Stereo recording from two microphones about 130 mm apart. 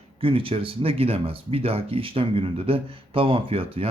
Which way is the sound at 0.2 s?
45° right (ahead or behind).